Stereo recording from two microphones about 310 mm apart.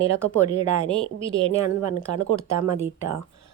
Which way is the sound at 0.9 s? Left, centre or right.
Centre.